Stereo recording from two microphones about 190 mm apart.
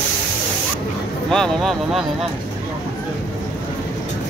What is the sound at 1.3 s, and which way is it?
Speech, centre (ahead or behind).